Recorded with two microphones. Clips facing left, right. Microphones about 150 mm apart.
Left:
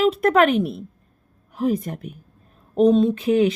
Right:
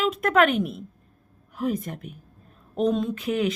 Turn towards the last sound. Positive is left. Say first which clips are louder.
# left 7 dB
turn(degrees=30)  # may be behind; listen again after turning